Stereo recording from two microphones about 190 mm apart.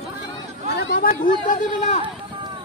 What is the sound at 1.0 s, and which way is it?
Speech, 50° left (ahead or behind).